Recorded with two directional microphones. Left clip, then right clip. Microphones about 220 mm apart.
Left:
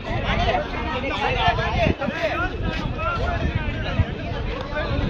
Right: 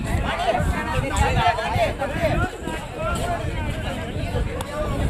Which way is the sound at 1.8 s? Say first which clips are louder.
Even; 55° right (ahead or behind).